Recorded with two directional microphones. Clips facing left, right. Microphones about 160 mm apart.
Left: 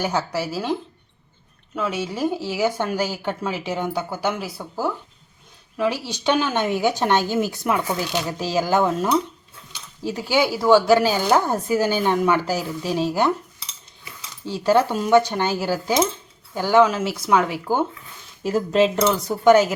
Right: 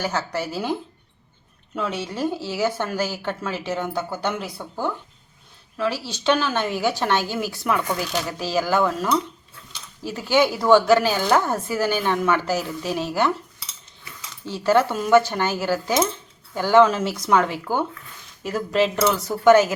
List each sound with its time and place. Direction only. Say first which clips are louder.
0.0 s speech: left 2 dB; 10° left (ahead or behind)
1.7 s speech: left 2 dB; 5° left (ahead or behind); by 9.0 s 20° left (ahead or behind)
10.1 s speech: right 1 dB; 15° left (ahead or behind)
18.4 s speech: left 3 dB; 25° left (ahead or behind)